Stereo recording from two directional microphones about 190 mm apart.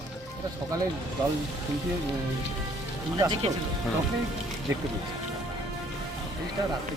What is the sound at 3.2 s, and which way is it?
Speech, 25° right (ahead or behind).